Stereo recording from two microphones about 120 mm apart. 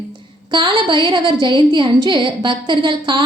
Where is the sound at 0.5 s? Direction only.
40° right (ahead or behind).